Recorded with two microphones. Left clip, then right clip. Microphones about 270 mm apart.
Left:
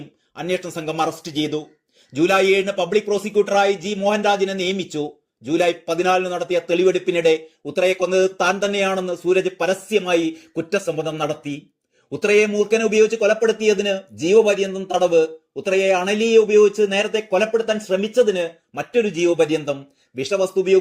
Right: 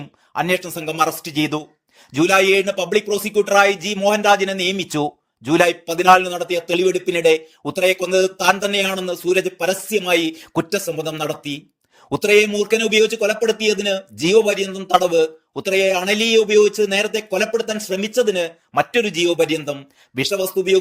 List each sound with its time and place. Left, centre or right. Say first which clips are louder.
0.3 s a man's voice: right 4 dB; right
10.7 s speech: left 5 dB; centre
11.3 s speech: right 1 dB; right
12.9 s speech: even; right
20.3 s speech: left 2 dB; centre